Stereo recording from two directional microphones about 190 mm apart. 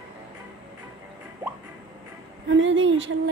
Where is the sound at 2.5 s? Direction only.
75° right (ahead or behind).